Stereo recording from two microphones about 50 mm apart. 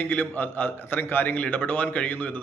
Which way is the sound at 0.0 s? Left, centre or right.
Left.